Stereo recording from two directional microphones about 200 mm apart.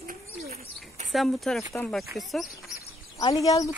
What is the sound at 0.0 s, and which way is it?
Bird, 45° right (ahead or behind).